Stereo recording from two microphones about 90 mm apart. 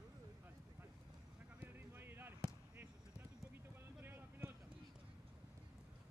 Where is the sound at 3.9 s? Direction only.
25° right (ahead or behind).